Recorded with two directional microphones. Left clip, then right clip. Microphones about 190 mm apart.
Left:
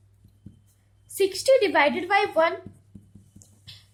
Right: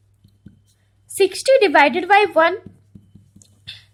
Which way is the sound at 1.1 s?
45° right (ahead or behind).